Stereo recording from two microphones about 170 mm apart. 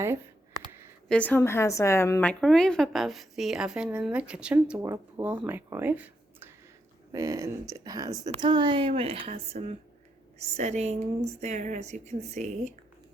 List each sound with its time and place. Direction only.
1.0 s a woman's voice: 5° left (ahead or behind)
2.4 s a woman's voice: 5° left (ahead or behind); by 12.7 s 40° right (ahead or behind)